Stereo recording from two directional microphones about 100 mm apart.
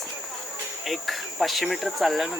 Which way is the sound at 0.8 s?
Centre (ahead or behind).